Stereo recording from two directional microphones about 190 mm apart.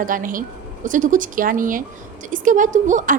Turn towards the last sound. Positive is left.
turn(degrees=-45)  # may be behind; listen again after turning